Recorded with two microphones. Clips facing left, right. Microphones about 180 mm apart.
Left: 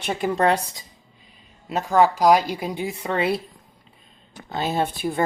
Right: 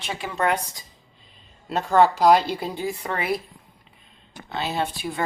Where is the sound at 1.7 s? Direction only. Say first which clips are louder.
Even; 10° left (ahead or behind).